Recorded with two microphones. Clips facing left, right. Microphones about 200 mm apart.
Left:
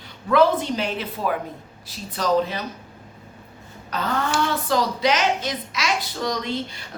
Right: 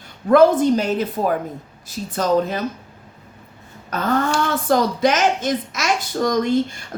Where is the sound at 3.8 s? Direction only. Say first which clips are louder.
Right 4 dB; 50° right (ahead or behind).